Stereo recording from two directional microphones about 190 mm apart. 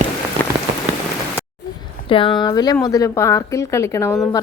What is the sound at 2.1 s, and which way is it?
A woman's voice, 25° left (ahead or behind).